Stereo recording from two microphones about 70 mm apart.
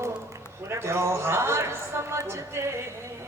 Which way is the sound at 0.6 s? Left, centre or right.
Right.